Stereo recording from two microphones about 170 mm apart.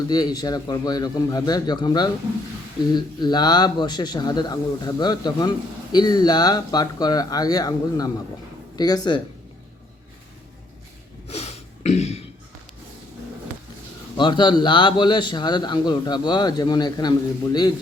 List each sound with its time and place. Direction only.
0.1 s a man's voice: 25° left (ahead or behind)
11.3 s a sound: 40° left (ahead or behind)
14.2 s a man's voice: 25° left (ahead or behind)